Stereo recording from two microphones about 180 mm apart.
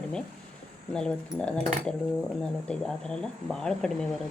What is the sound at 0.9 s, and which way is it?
Speech, 5° left (ahead or behind).